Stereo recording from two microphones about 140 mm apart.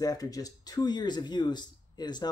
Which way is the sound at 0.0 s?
25° left (ahead or behind).